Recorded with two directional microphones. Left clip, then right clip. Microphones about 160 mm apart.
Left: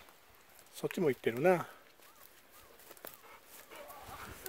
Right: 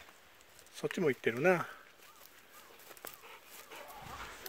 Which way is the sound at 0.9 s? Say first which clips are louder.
Even; 15° left (ahead or behind).